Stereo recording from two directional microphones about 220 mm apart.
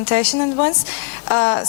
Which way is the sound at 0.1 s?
20° left (ahead or behind).